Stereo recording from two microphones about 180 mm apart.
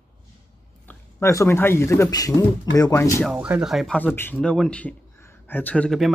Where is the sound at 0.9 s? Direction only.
15° left (ahead or behind).